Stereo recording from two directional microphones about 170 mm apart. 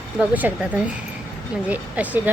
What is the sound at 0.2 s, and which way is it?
A woman's voice, 10° right (ahead or behind).